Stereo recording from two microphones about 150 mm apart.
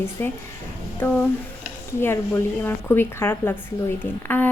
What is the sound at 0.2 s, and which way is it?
A woman's voice, 15° left (ahead or behind).